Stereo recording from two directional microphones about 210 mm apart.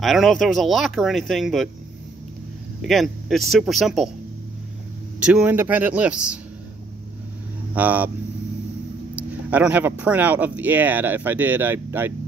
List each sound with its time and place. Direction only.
0.0 s speech: centre (ahead or behind)
2.8 s speech: centre (ahead or behind)
5.2 s speech: 5° right (ahead or behind)
7.7 s speech: 5° right (ahead or behind)
9.5 s speech: 5° right (ahead or behind)